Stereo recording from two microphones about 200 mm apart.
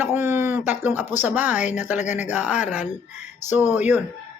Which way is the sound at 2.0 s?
35° left (ahead or behind).